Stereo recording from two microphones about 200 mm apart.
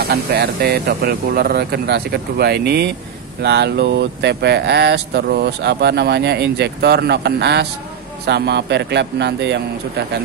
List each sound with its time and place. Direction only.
0.0 s speech: 55° right (ahead or behind)